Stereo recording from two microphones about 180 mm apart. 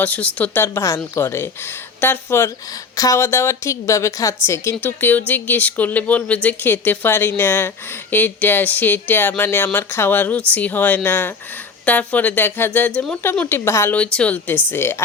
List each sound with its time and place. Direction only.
0.0 s speech: 10° left (ahead or behind)